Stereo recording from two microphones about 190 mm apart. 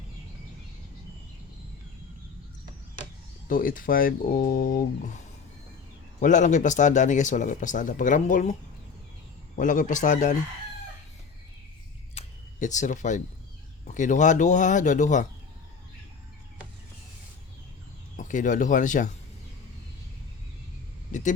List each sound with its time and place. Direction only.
3.5 s speech: 45° left (ahead or behind)
9.6 s speech: 45° left (ahead or behind)
12.1 s a sound: 40° left (ahead or behind)
13.8 s speech: 40° left (ahead or behind)
18.2 s speech: 45° left (ahead or behind)
21.1 s speech: 40° left (ahead or behind)